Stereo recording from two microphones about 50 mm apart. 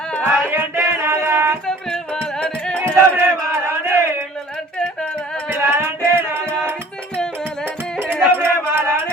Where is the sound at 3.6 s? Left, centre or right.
Right.